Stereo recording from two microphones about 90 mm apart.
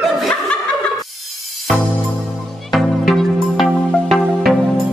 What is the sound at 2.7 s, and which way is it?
Music, centre (ahead or behind).